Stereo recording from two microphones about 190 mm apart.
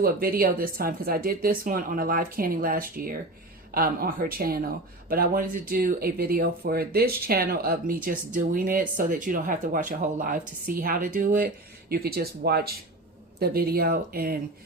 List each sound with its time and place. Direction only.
0.0 s speech: 50° right (ahead or behind)